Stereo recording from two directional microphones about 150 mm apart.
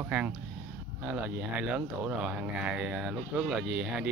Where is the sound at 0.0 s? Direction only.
10° right (ahead or behind).